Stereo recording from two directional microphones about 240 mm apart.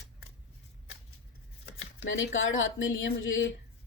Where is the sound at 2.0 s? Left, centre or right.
Left.